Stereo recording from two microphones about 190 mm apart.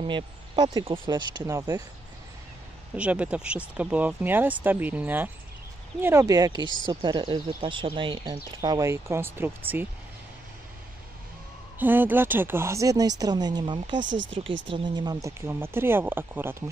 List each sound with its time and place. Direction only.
0.0 s speech: 25° right (ahead or behind)
3.0 s speech: 5° right (ahead or behind)
6.6 s speech: 25° left (ahead or behind)
6.9 s speech: 25° right (ahead or behind)
11.8 s speech: 10° right (ahead or behind)
14.0 s speech: 75° right (ahead or behind)
14.7 s speech: 20° right (ahead or behind)